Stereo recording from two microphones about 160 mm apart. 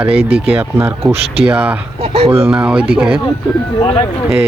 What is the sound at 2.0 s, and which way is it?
Speech, 40° right (ahead or behind).